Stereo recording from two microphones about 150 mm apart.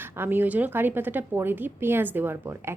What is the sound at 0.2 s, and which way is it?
A woman's voice, 15° right (ahead or behind).